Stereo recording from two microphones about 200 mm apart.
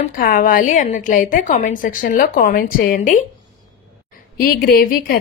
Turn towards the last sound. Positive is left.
turn(degrees=45)  # may be behind; listen again after turning